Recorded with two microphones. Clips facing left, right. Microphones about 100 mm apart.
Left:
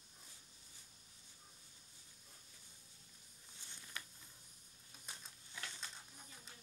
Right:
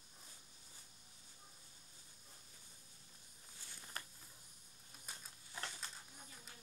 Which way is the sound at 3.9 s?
40° right (ahead or behind).